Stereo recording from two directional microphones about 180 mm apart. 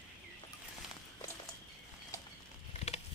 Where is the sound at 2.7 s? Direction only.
35° left (ahead or behind).